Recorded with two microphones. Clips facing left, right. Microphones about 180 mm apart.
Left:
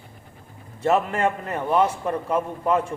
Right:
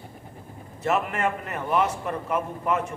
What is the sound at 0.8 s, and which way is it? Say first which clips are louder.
A man's voice: left 4 dB; 30° left (ahead or behind).